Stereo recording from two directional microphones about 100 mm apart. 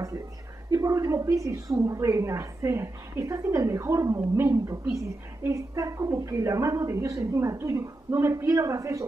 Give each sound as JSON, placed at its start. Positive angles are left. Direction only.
{"t": 0.7, "sound": "a woman's voice", "side_deg": -30}